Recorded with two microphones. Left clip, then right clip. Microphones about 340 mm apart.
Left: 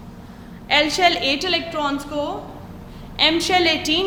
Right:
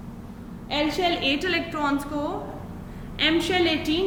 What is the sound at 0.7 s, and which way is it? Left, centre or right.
A woman's voice, centre.